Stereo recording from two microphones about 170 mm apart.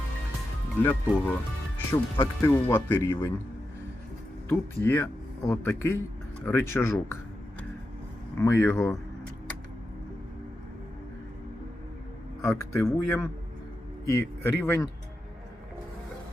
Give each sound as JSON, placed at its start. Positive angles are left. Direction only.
{"t": 0.8, "sound": "speech", "side_deg": 10}
{"t": 4.8, "sound": "speech", "side_deg": 10}
{"t": 8.4, "sound": "speech", "side_deg": 15}
{"t": 12.4, "sound": "speech", "side_deg": 15}